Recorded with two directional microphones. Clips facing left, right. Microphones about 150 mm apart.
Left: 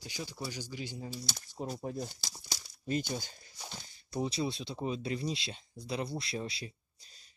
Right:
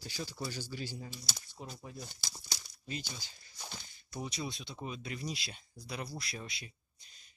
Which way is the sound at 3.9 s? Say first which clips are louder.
Left 7 dB; 30° left (ahead or behind).